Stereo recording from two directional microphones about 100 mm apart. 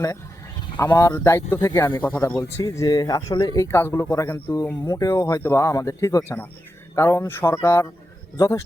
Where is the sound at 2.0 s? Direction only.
20° left (ahead or behind); by 3.5 s 40° left (ahead or behind).